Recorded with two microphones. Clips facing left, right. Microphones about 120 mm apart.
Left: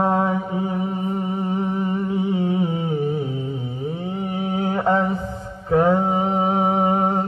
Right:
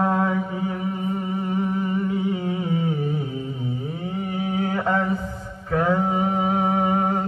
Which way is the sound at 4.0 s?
25° left (ahead or behind).